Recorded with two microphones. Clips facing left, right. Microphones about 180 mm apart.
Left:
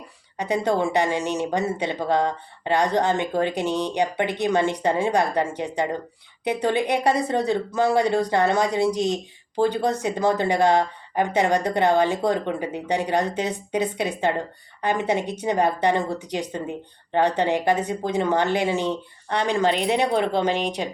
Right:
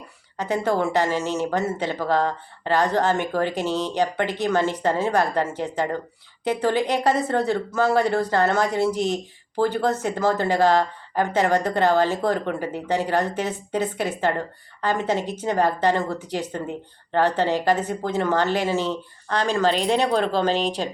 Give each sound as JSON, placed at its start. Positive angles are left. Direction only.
{"t": 0.3, "sound": "speech", "side_deg": 15}